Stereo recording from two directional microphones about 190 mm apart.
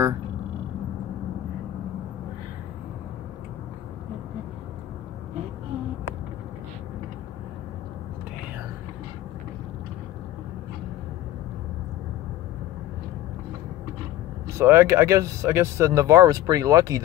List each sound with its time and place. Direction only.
14.6 s speech: 15° right (ahead or behind)